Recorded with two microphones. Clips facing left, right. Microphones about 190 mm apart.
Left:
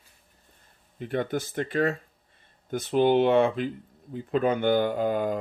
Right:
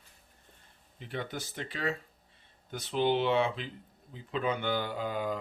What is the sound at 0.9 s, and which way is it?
Speech, 55° left (ahead or behind).